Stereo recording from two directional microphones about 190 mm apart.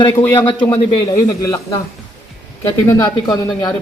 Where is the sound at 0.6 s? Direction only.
30° left (ahead or behind).